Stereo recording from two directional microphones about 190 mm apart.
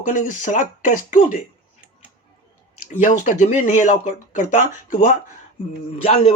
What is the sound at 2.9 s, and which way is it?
Speech, 40° left (ahead or behind).